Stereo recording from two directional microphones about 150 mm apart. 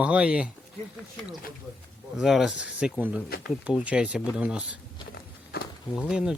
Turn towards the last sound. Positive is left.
turn(degrees=-5)  # may be behind; listen again after turning